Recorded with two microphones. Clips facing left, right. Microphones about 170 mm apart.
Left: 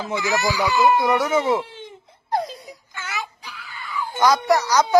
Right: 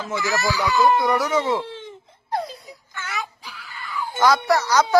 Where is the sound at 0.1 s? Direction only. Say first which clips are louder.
Left 1 dB; 20° left (ahead or behind).